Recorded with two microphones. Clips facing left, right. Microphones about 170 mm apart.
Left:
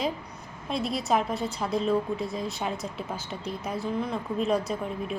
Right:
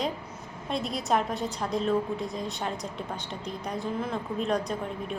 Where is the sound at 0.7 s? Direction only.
Centre (ahead or behind).